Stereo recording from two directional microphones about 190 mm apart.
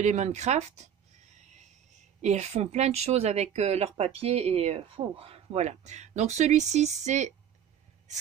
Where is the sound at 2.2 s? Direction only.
35° right (ahead or behind).